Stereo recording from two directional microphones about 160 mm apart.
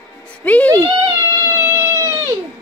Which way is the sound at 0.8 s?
20° right (ahead or behind).